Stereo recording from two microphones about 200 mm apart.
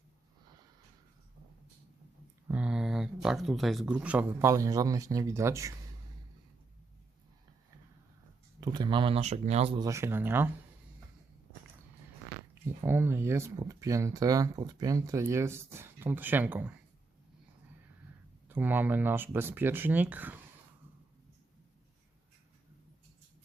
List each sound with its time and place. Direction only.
2.5 s speech: 5° right (ahead or behind)
8.6 s speech: 20° right (ahead or behind)
9.7 s speech: 15° right (ahead or behind)
12.6 s speech: 10° right (ahead or behind)
18.4 s speech: 10° right (ahead or behind)